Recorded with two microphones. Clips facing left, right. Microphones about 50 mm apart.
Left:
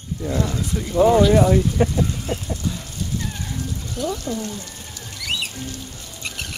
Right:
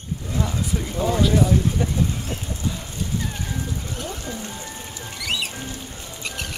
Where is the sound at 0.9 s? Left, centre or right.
Left.